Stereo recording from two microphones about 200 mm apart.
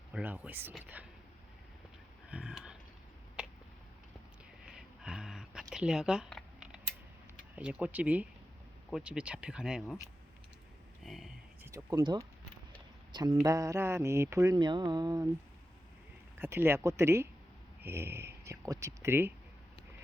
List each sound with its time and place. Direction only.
0.1 s mantra: 10° right (ahead or behind)
2.3 s a sound: 5° right (ahead or behind)
4.6 s a sound: 5° right (ahead or behind)
7.5 s mantra: 5° right (ahead or behind)
8.9 s speech: 5° right (ahead or behind)
11.0 s speech: centre (ahead or behind)
11.6 s speech: 15° right (ahead or behind)
13.1 s mantra: 20° right (ahead or behind)
16.4 s mantra: 10° right (ahead or behind)
17.8 s speech: 10° right (ahead or behind)